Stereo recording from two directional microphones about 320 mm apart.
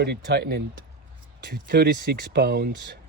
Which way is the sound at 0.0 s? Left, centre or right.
Right.